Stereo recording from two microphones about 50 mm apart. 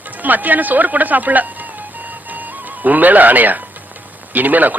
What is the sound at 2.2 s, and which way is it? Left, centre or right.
Music, right.